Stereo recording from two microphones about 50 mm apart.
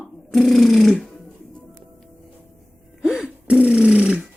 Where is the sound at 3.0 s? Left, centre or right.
Centre.